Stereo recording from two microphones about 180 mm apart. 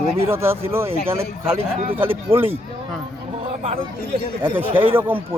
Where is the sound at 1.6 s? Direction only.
30° right (ahead or behind).